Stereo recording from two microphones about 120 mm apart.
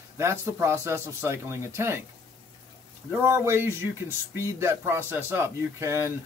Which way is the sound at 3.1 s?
20° right (ahead or behind).